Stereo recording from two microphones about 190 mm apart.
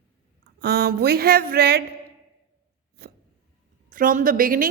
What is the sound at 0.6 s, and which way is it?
A woman's voice, 55° right (ahead or behind).